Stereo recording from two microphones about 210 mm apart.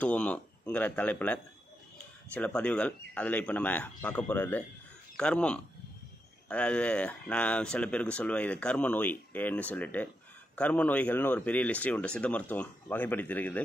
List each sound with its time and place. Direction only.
0.0 s speech: 5° left (ahead or behind)